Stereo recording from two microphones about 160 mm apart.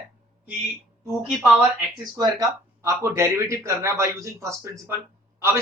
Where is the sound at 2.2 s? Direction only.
20° right (ahead or behind).